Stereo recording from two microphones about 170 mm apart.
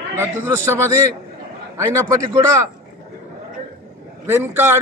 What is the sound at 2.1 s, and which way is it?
Speech, 20° right (ahead or behind).